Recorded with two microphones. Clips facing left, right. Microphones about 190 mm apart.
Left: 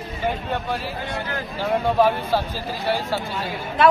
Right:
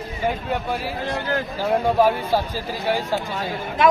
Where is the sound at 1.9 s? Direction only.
10° right (ahead or behind).